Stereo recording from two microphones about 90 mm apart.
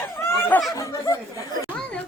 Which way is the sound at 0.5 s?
20° left (ahead or behind).